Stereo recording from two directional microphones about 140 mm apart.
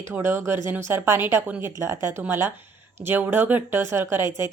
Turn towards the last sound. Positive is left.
turn(degrees=-20)  # may be behind; listen again after turning